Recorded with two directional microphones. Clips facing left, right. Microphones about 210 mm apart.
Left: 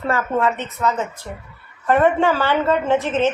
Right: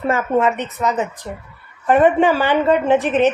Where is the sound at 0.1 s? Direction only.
20° right (ahead or behind).